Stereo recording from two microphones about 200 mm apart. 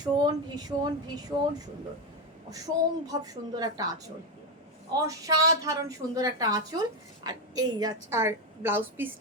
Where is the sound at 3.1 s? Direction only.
15° right (ahead or behind).